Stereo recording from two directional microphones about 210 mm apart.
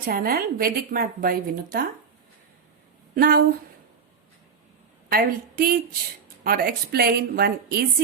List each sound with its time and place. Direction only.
0.0 s a woman's voice: 45° right (ahead or behind)
3.2 s a woman's voice: 45° right (ahead or behind)
5.1 s a woman's voice: 45° right (ahead or behind)